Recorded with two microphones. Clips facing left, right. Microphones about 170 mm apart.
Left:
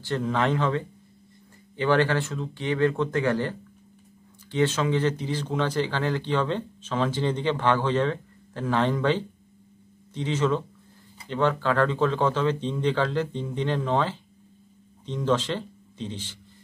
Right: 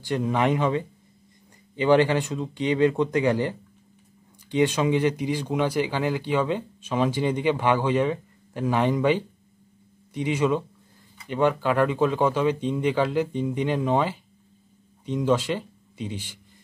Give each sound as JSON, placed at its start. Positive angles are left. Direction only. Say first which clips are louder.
{"t": 0.0, "sound": "speech", "louder": "right 2 dB", "side_deg": -15}